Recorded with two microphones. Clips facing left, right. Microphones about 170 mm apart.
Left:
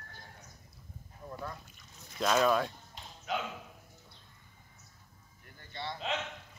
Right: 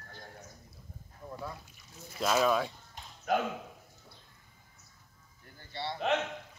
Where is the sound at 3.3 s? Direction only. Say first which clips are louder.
Right 6 dB; 50° right (ahead or behind).